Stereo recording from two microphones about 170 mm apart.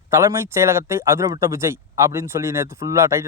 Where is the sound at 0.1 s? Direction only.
15° right (ahead or behind).